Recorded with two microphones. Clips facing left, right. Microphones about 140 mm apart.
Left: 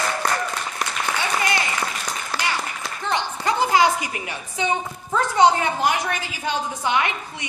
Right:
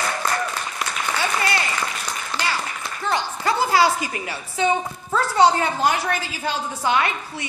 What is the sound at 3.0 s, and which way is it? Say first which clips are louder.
A woman's voice: right 1 dB; 20° left (ahead or behind).